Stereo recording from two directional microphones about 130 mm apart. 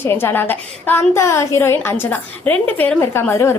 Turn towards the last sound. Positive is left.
turn(degrees=20)  # may be behind; listen again after turning